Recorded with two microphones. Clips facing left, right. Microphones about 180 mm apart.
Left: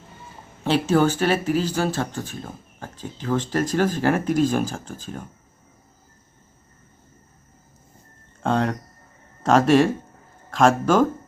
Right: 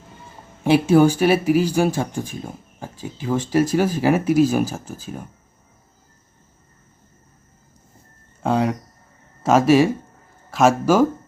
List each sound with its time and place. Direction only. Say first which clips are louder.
0.6 s speech: right 5 dB; 10° right (ahead or behind)
8.4 s a sound: right 2 dB; 5° right (ahead or behind)
9.4 s speech: right 2 dB; 5° right (ahead or behind)